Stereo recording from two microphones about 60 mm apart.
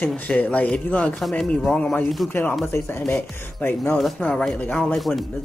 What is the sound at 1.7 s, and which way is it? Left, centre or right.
Speech, centre.